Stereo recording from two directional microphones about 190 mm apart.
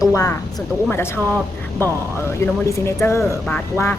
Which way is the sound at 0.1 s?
15° left (ahead or behind).